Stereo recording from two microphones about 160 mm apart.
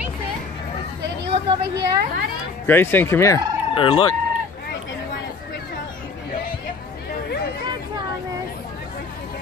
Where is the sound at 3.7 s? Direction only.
35° left (ahead or behind).